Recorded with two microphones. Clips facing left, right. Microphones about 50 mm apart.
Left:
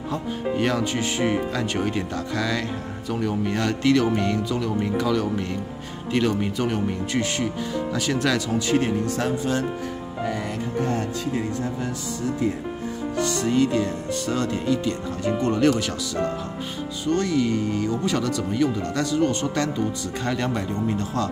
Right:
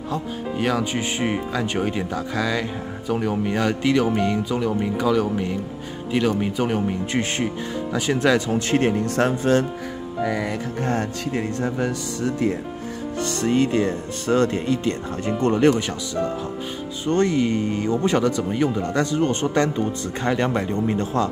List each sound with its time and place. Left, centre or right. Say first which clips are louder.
0.6 s speech: right 2 dB; centre
0.9 s speech: left 1 dB; centre
7.1 s speech: right 1 dB; right
8.5 s speech: right 2 dB; right
10.8 s speech: even; right
13.2 s speech: right 1 dB; right
17.0 s speech: right 2 dB; right